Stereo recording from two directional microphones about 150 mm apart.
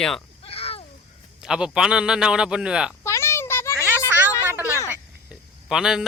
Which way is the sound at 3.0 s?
20° left (ahead or behind).